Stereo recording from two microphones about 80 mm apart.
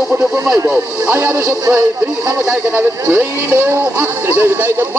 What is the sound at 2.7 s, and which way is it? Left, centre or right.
Speech, right.